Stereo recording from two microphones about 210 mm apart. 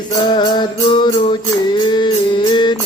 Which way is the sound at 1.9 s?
20° left (ahead or behind).